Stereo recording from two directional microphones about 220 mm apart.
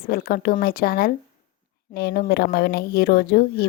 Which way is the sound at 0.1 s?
45° left (ahead or behind).